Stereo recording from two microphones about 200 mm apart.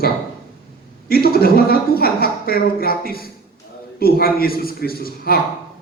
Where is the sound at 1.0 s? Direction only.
50° left (ahead or behind).